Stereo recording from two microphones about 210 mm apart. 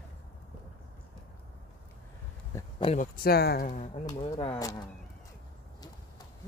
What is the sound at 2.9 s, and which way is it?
Speech, 45° left (ahead or behind).